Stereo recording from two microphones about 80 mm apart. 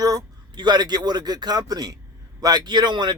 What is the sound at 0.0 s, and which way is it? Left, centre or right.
Speech, right.